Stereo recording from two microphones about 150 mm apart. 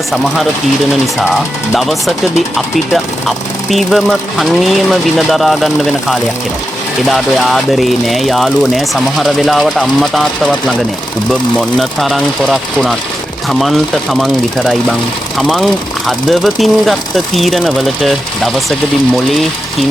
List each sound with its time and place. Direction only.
1.7 s speech: centre (ahead or behind)